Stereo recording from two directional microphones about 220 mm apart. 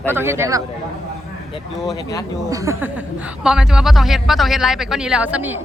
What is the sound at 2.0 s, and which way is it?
Speech, 15° left (ahead or behind).